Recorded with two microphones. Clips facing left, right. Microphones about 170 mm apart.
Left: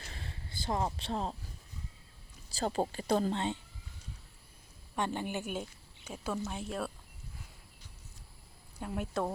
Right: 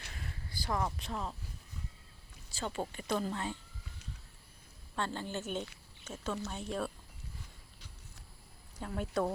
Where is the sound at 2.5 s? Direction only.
35° left (ahead or behind).